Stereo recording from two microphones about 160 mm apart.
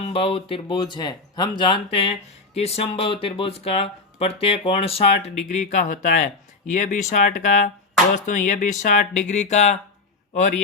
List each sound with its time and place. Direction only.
0.0 s speech: 35° left (ahead or behind)